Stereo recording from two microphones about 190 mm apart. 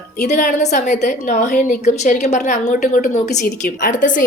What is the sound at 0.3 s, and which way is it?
A woman's voice, 40° left (ahead or behind).